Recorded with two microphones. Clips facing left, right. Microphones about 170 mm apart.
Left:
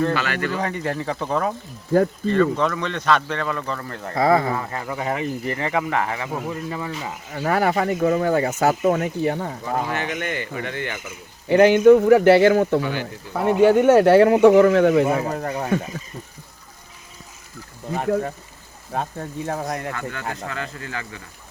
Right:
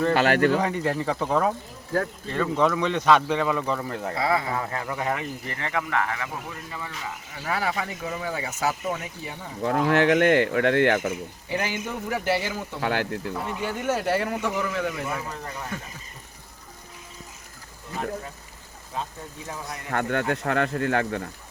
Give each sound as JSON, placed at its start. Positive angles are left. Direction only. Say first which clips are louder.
{"t": 0.1, "sound": "speech", "louder": "right 4 dB", "side_deg": -55}
{"t": 0.6, "sound": "a man's voice", "louder": "even", "side_deg": -5}
{"t": 4.1, "sound": "speech", "louder": "left 8 dB", "side_deg": 45}
{"t": 4.8, "sound": "speech", "louder": "left 3 dB", "side_deg": 10}
{"t": 7.3, "sound": "speech", "louder": "left 8 dB", "side_deg": 50}
{"t": 9.6, "sound": "speech", "louder": "right 7 dB", "side_deg": -65}
{"t": 11.4, "sound": "speech", "louder": "left 18 dB", "side_deg": 65}
{"t": 12.8, "sound": "speech", "louder": "even", "side_deg": -80}
{"t": 13.3, "sound": "speech", "louder": "left 14 dB", "side_deg": 65}
{"t": 17.9, "sound": "speech", "louder": "left 9 dB", "side_deg": 60}
{"t": 19.9, "sound": "speech", "louder": "right 5 dB", "side_deg": -60}